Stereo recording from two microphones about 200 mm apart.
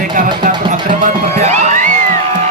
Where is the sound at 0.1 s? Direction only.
40° right (ahead or behind).